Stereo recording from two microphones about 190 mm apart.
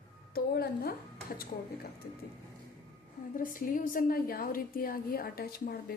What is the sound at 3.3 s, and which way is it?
A woman's voice, 45° left (ahead or behind).